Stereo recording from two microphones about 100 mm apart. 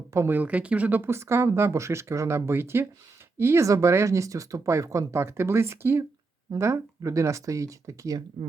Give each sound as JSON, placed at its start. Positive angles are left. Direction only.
{"t": 0.1, "sound": "speech", "side_deg": -20}